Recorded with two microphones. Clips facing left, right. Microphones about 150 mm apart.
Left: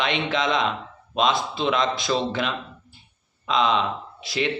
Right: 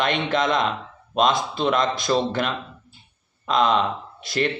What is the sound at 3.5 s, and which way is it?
Speech, 45° right (ahead or behind).